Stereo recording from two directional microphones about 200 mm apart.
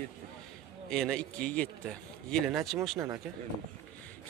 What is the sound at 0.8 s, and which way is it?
A man's voice, 5° left (ahead or behind).